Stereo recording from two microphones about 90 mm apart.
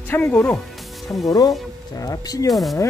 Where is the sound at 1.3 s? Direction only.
45° left (ahead or behind).